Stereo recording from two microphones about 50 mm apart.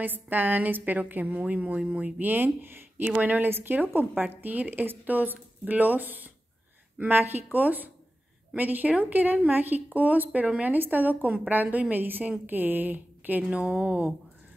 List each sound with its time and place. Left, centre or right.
0.0 s a woman's voice: right
13.5 s speech: right